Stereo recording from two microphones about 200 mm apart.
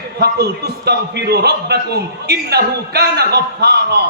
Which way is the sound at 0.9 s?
55° right (ahead or behind).